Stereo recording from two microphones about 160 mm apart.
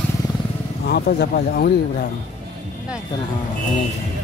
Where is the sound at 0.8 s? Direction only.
90° left.